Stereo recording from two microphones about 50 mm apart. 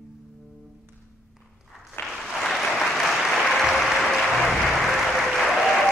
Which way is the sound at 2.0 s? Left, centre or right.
Left.